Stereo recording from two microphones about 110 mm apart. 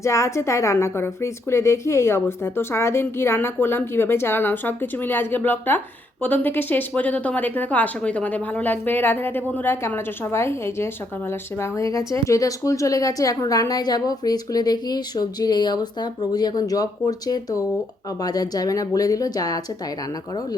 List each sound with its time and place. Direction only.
0.0 s a woman's voice: 25° left (ahead or behind)